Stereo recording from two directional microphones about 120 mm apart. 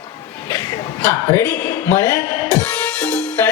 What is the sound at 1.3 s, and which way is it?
Speech, 20° left (ahead or behind).